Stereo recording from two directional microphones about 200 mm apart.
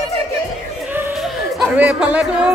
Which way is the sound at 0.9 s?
5° right (ahead or behind).